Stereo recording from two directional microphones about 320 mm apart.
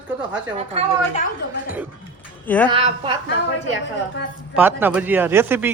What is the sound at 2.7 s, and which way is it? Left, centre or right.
Speech, centre.